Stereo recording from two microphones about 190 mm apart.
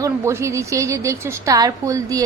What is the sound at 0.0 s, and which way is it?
A woman's voice, 15° right (ahead or behind).